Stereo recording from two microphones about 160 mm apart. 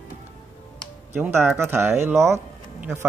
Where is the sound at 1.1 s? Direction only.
15° right (ahead or behind).